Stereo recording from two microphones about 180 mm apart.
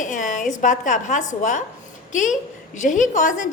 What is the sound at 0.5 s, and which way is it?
A woman's voice, 45° left (ahead or behind).